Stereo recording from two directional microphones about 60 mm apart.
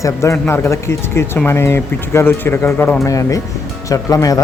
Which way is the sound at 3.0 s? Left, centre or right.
Left.